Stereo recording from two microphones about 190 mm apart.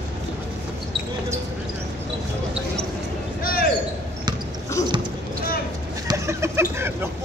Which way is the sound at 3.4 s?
50° left (ahead or behind).